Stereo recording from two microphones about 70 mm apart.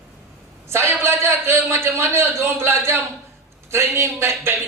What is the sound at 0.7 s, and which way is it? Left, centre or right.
A man's voice, right.